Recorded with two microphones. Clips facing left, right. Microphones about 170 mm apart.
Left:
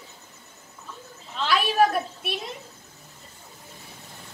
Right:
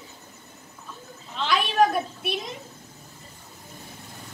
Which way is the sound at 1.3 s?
5° left (ahead or behind).